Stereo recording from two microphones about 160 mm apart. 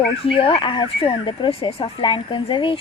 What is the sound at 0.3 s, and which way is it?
A woman's voice, 35° left (ahead or behind).